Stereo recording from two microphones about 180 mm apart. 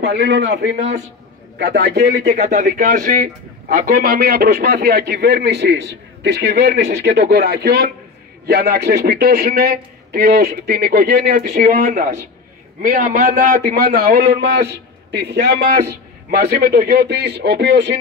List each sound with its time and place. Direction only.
0.0 s a man's voice: 70° right (ahead or behind)
0.7 s a man's voice: 40° right (ahead or behind)
1.6 s a man's voice: 70° right (ahead or behind)
2.1 s a man's voice: 40° right (ahead or behind); by 6.8 s 70° right (ahead or behind)
7.1 s a man's voice: 50° right (ahead or behind); by 17.9 s 75° right (ahead or behind)